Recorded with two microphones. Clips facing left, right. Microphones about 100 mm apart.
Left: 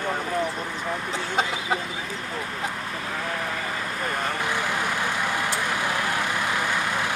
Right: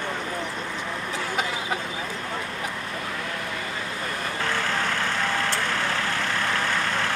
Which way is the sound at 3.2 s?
35° left (ahead or behind).